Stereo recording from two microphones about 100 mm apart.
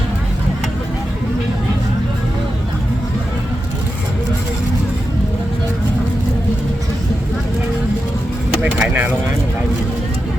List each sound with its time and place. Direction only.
8.6 s vehicle: 15° right (ahead or behind)